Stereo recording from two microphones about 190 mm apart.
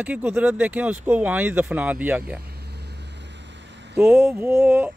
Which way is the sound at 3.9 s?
10° right (ahead or behind).